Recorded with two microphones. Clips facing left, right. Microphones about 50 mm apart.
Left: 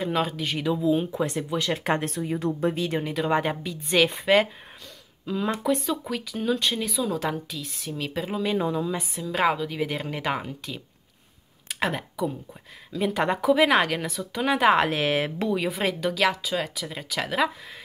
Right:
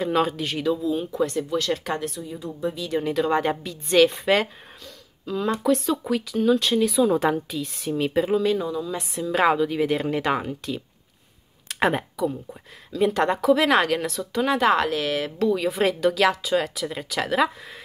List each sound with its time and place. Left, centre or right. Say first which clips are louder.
0.0 s speech: right 3 dB; centre
0.7 s speech: left 1 dB; left
1.9 s a woman's voice: left 3 dB; left
3.0 s speech: right 6 dB; centre
7.0 s a woman's voice: right 7 dB; centre
8.5 s speech: left 1 dB; left
9.1 s speech: right 5 dB; centre
13.0 s speech: right 3 dB; centre; by 15.4 s left
15.4 s speech: right 8 dB; centre
15.7 s speech: right 5 dB; centre